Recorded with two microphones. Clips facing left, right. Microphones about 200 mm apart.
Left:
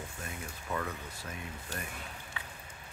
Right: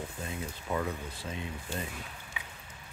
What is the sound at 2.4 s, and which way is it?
Vehicle, 15° right (ahead or behind).